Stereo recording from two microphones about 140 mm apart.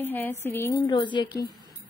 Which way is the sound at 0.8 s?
35° left (ahead or behind).